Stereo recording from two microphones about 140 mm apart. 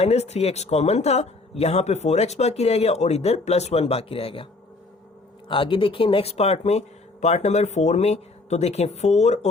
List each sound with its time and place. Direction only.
0.0 s speech: 50° left (ahead or behind)
5.5 s speech: 35° left (ahead or behind); by 9.5 s 50° left (ahead or behind)